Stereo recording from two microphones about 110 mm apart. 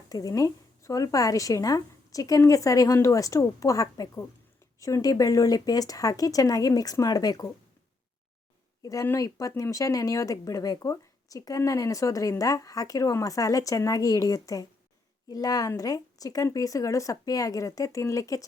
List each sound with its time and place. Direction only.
0.1 s speech: 30° left (ahead or behind)
8.8 s speech: 30° left (ahead or behind)